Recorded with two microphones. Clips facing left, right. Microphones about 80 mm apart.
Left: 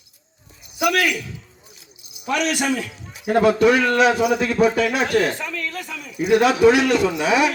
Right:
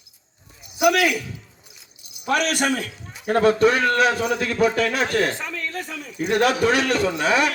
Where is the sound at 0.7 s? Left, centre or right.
Right.